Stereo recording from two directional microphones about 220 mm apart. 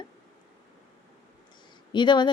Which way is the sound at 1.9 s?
20° left (ahead or behind).